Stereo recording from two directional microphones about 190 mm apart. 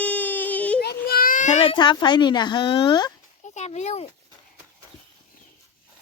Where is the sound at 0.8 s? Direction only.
55° left (ahead or behind); by 3.1 s 25° left (ahead or behind).